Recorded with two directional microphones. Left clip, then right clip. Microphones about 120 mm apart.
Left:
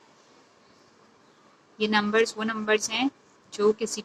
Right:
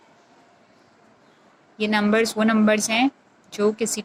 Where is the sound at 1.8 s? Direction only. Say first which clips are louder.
Right 2 dB; 35° right (ahead or behind).